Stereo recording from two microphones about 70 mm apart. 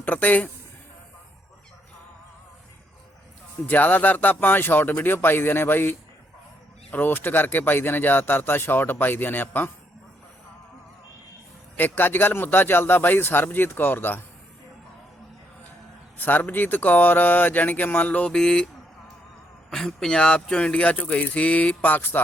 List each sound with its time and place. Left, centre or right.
0.0 s speech: left
3.7 s speech: left
11.8 s speech: left
16.1 s speech: left
18.3 s speech: centre
19.7 s speech: centre; by 22.2 s left